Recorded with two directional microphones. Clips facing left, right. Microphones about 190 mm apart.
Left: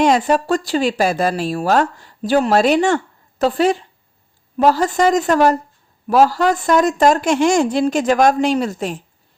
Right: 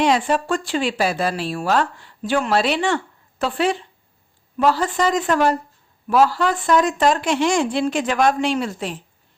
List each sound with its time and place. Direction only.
0.0 s speech: 45° left (ahead or behind)